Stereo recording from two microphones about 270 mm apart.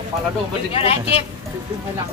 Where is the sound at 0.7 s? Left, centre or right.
Left.